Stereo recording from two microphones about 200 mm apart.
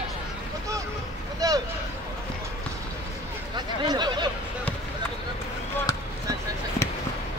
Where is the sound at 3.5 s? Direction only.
20° right (ahead or behind).